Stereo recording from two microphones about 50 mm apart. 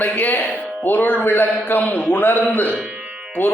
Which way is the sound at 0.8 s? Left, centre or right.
Left.